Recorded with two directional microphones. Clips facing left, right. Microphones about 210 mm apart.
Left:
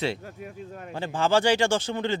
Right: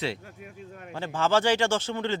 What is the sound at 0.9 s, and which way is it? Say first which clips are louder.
Speech: left 1 dB; 15° left (ahead or behind).